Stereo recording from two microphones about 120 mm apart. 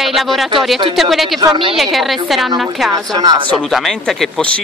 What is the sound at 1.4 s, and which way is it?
Speech, 35° right (ahead or behind).